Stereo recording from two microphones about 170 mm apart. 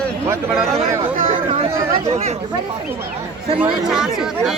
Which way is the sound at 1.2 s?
45° right (ahead or behind).